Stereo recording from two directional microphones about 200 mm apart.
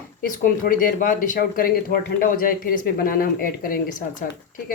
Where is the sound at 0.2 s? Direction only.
45° left (ahead or behind).